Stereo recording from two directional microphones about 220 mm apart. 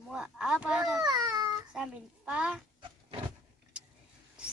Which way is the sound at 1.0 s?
20° right (ahead or behind).